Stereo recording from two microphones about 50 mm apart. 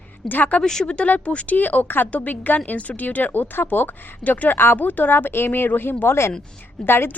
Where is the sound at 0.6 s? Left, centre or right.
Centre.